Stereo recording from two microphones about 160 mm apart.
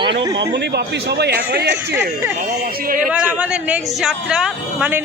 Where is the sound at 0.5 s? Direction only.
90° right.